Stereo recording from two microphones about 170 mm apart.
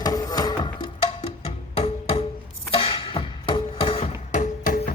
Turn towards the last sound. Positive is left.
turn(degrees=60)  # may be behind; listen again after turning